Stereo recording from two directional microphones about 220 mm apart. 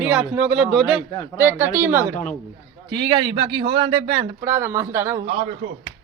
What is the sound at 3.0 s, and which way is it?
Speech, 20° right (ahead or behind).